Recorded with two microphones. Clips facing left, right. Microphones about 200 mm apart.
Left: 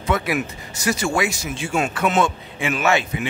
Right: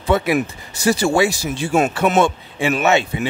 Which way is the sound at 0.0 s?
30° right (ahead or behind).